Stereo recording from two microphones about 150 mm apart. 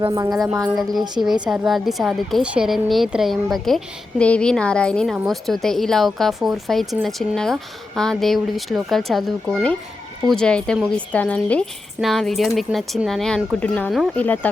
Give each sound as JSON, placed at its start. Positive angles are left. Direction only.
{"t": 0.1, "sound": "a woman's voice", "side_deg": -20}
{"t": 1.2, "sound": "speech", "side_deg": 0}